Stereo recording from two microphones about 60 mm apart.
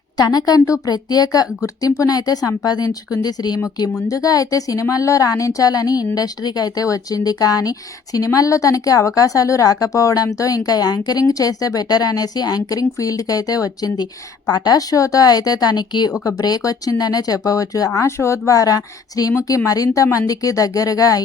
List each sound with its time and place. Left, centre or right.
0.3 s speech: left
4.1 s a woman's voice: left
19.5 s a woman's voice: left